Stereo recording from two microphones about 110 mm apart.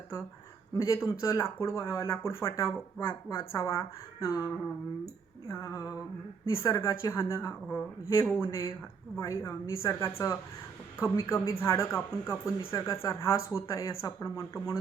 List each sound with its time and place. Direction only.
0.8 s speech: 25° left (ahead or behind)